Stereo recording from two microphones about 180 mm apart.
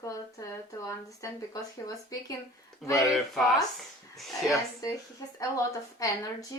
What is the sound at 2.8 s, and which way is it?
Speech, centre (ahead or behind).